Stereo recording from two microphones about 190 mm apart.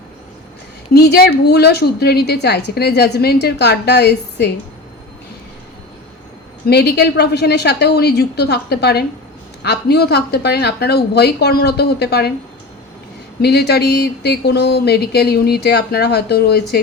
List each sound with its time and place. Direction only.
0.9 s a woman's voice: 55° left (ahead or behind)
6.7 s a woman's voice: 60° left (ahead or behind)
13.4 s a woman's voice: 60° left (ahead or behind)